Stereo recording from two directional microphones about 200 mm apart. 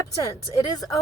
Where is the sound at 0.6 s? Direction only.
20° left (ahead or behind).